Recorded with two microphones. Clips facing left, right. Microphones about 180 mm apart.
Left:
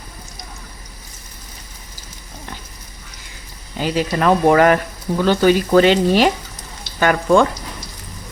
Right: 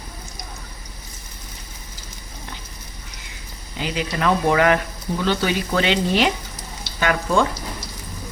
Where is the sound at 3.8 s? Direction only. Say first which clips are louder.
Left 5 dB; 45° left (ahead or behind).